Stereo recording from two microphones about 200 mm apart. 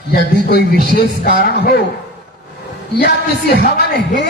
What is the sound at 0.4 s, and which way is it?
A woman's voice, 50° left (ahead or behind).